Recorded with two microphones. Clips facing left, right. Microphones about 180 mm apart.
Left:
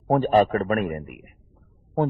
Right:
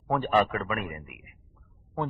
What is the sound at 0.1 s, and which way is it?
A man's voice, 40° left (ahead or behind).